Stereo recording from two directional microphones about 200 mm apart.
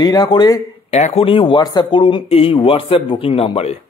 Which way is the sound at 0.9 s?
30° left (ahead or behind).